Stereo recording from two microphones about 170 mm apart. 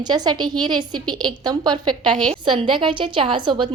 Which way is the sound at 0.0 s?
25° right (ahead or behind).